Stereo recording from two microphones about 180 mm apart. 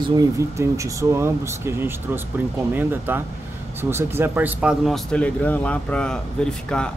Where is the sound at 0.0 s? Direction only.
20° right (ahead or behind).